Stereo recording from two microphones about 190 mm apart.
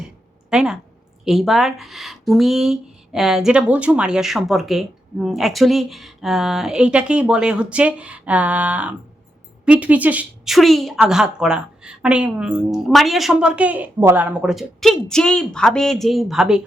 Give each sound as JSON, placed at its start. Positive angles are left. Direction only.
{"t": 0.5, "sound": "speech", "side_deg": -5}